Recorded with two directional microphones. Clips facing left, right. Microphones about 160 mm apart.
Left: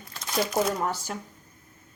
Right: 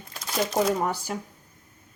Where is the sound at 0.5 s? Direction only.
25° right (ahead or behind).